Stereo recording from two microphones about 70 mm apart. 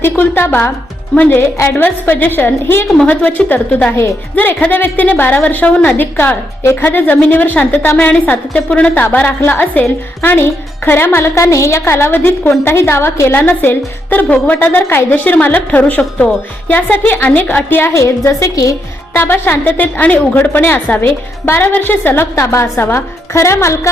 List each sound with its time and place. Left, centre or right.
0.0 s a woman's voice: left
1.4 s a woman's voice: left
1.8 s a woman's voice: left
11.3 s a woman's voice: left
13.4 s a woman's voice: left
19.1 s a woman's voice: left